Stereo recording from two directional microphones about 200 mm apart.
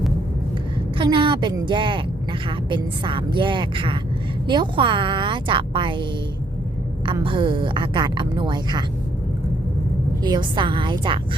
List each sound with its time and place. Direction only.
0.9 s a woman's voice: 25° right (ahead or behind)
10.2 s a woman's voice: 20° right (ahead or behind)